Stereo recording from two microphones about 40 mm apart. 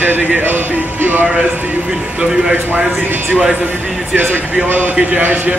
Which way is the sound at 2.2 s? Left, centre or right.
Right.